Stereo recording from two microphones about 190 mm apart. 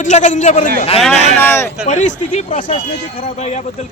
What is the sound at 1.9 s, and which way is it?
Speech, 40° left (ahead or behind).